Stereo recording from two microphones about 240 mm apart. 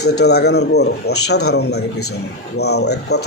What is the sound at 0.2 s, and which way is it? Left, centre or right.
A man's voice, left.